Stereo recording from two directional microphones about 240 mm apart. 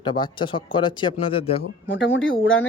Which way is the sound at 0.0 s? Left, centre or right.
Centre.